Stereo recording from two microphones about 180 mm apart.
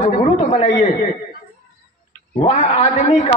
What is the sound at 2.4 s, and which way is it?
Speech, 40° left (ahead or behind).